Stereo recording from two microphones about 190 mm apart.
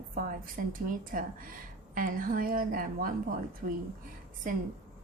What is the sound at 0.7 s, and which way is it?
A woman's voice, 45° right (ahead or behind).